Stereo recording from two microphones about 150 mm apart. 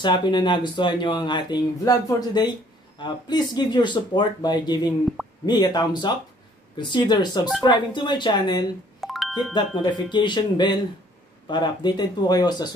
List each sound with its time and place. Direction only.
0.0 s speech: 30° left (ahead or behind)
9.0 s music: centre (ahead or behind)
9.5 s speech: 30° left (ahead or behind)